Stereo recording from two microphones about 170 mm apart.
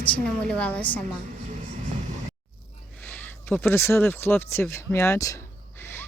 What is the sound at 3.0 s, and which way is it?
Speech, 10° left (ahead or behind).